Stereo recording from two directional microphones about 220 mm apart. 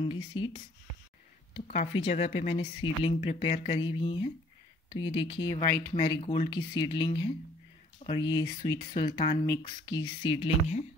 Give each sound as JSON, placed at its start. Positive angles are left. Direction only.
{"t": 0.1, "sound": "speech", "side_deg": 25}